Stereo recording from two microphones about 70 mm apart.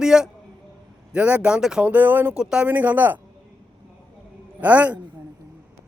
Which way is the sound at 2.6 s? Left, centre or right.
Right.